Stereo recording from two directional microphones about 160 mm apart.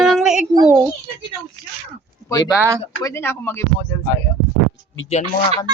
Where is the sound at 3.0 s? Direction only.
15° left (ahead or behind).